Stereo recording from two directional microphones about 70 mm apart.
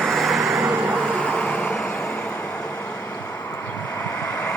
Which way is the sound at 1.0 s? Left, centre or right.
Centre.